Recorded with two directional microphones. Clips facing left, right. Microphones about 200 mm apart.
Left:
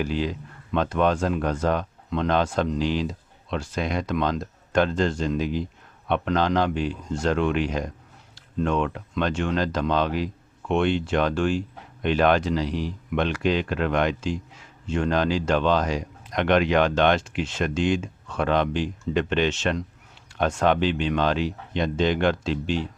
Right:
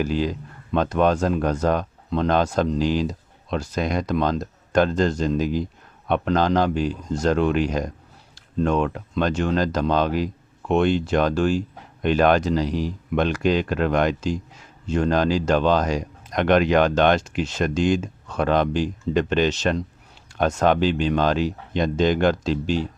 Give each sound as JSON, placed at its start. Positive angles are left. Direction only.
{"t": 0.0, "sound": "speech", "side_deg": -40}